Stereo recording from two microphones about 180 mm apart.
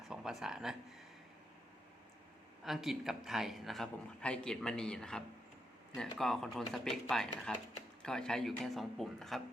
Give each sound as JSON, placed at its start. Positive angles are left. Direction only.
{"t": 0.1, "sound": "speech", "side_deg": -5}
{"t": 2.6, "sound": "a man's voice", "side_deg": 0}